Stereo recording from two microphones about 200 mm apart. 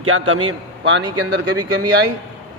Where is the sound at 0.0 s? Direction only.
90° right.